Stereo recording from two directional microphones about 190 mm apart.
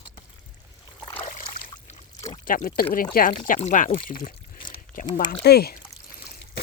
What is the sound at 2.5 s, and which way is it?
Speech, 45° left (ahead or behind).